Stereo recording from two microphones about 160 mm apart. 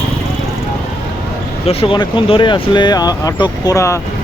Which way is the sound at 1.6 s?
35° left (ahead or behind).